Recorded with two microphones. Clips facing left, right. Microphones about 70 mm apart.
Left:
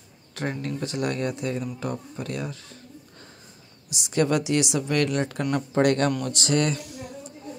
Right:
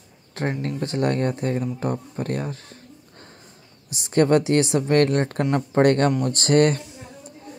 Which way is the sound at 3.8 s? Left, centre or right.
Right.